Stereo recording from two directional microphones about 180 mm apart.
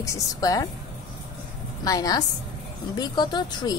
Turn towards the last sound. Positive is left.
turn(degrees=25)  # may be behind; listen again after turning